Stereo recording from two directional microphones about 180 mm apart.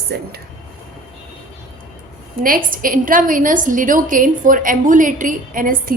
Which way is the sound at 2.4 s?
50° right (ahead or behind).